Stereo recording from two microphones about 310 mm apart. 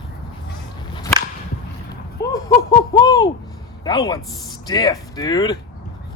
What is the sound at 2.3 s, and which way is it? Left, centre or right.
Owl, centre.